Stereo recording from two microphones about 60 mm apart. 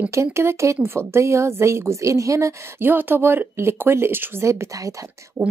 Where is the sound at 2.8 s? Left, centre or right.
Right.